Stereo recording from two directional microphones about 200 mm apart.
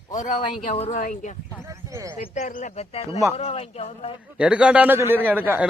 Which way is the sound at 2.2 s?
35° left (ahead or behind).